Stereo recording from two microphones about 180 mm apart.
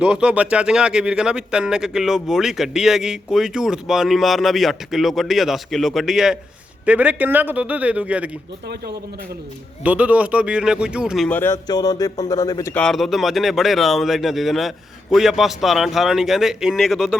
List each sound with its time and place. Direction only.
0.0 s a man's voice: 5° right (ahead or behind)
9.8 s speech: 10° right (ahead or behind)
11.3 s speech: 10° left (ahead or behind)
12.7 s speech: 5° left (ahead or behind)